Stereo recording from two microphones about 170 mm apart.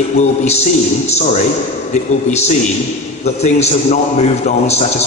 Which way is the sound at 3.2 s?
40° left (ahead or behind).